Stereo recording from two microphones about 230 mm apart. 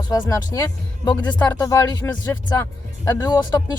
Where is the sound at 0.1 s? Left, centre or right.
Centre.